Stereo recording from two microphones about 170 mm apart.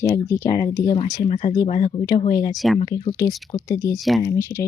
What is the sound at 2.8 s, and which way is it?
Speech, 30° left (ahead or behind).